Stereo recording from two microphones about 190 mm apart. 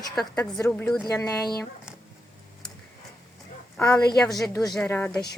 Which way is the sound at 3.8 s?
5° left (ahead or behind).